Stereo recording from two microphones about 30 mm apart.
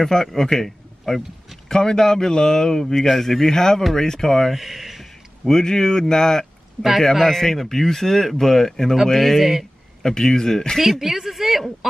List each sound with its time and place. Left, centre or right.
0.0 s a man's voice: centre
3.0 s speech: centre
4.5 s a sound: centre
5.5 s speech: centre
7.0 s speech: centre
9.4 s speech: centre
10.0 s speech: left
10.8 s speech: centre
11.8 s a sound: centre